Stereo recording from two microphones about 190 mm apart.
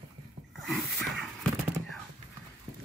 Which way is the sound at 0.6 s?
Centre (ahead or behind).